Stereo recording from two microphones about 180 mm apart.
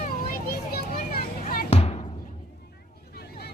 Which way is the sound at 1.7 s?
35° left (ahead or behind).